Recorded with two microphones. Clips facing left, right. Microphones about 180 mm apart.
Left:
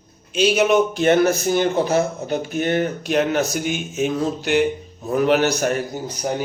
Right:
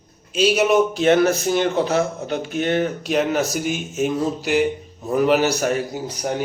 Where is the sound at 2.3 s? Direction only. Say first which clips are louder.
Left 1 dB; 45° left (ahead or behind).